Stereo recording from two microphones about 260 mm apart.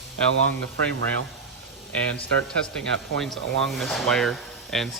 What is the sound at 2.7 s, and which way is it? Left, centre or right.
Speech, centre.